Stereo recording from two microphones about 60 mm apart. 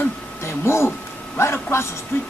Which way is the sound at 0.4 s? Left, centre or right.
Left.